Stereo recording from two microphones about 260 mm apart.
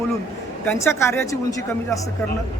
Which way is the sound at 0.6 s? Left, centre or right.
Centre.